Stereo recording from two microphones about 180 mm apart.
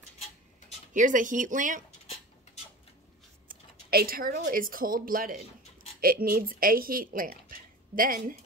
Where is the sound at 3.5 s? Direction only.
55° right (ahead or behind).